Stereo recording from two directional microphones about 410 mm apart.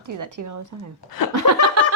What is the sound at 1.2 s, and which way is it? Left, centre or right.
Laughter, left.